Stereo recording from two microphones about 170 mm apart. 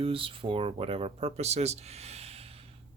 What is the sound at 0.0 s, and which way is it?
Speech, 30° right (ahead or behind).